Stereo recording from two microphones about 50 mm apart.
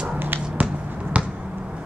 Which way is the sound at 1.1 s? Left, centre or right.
Right.